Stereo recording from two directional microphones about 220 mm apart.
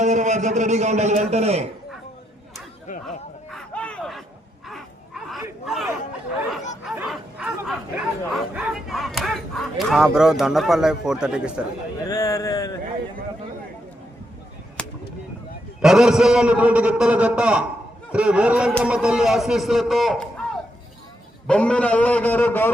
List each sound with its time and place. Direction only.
0.0 s a man's voice: 35° right (ahead or behind)
2.8 s whip: 35° left (ahead or behind)
3.5 s a sound: 5° left (ahead or behind)
6.8 s bow-wow: centre (ahead or behind)
12.0 s speech: 15° left (ahead or behind)
14.8 s a sound: 5° left (ahead or behind)
15.8 s a man's voice: centre (ahead or behind)
21.4 s a man's voice: 5° left (ahead or behind)